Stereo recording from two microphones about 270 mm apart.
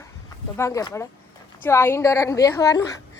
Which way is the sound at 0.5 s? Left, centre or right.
Centre.